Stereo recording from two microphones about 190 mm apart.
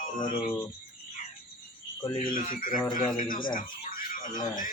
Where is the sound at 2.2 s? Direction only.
45° left (ahead or behind).